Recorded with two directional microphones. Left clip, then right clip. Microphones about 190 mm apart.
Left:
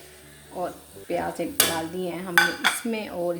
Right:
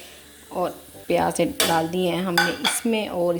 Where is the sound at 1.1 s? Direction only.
45° right (ahead or behind).